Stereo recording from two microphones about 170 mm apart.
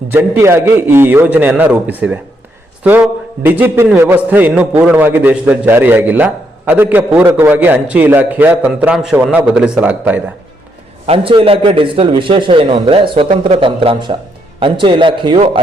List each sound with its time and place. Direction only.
0.1 s a man's voice: 15° right (ahead or behind)
11.0 s a man's voice: 35° right (ahead or behind)